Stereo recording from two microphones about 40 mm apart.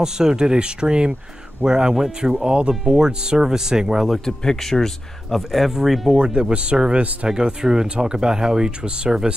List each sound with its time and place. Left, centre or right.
0.0 s speech: centre
2.3 s speech: right
4.3 s speech: centre
6.1 s speech: right
7.2 s speech: centre